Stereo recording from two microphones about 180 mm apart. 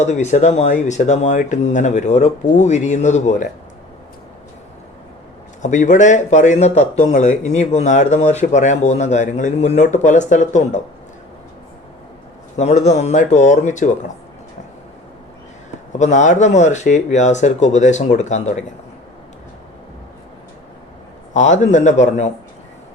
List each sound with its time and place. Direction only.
0.0 s a man's voice: 40° left (ahead or behind)
5.6 s a man's voice: 45° left (ahead or behind)
12.5 s a man's voice: 40° left (ahead or behind)
16.0 s a man's voice: 40° left (ahead or behind)
21.3 s a man's voice: 40° left (ahead or behind)